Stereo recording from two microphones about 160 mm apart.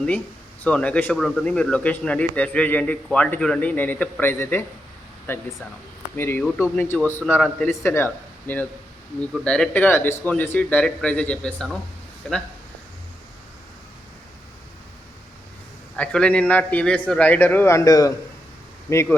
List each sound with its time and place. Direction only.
0.6 s speech: 10° left (ahead or behind)
16.0 s speech: 5° left (ahead or behind)